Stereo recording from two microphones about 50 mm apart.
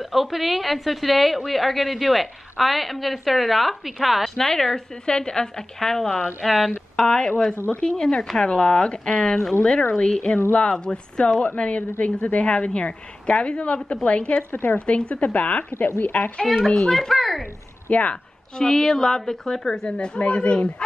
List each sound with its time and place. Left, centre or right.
0.0 s a woman's voice: centre
7.0 s a woman's voice: centre
14.3 s speech: left
14.9 s a woman's voice: left
16.4 s a woman's voice: centre
17.8 s speech: left
18.1 s a woman's voice: centre